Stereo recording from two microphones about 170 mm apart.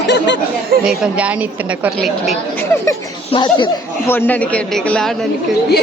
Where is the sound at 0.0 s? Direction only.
90° left.